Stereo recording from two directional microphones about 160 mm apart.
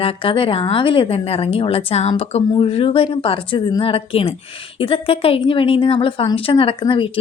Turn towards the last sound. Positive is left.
turn(degrees=35)  # may be behind; listen again after turning